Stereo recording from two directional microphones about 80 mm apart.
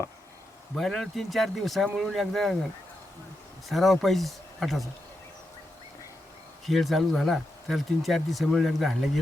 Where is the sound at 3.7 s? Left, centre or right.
Centre.